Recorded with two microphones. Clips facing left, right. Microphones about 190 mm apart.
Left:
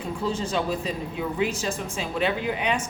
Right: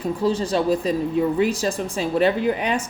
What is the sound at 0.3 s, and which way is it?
Speech, 35° right (ahead or behind).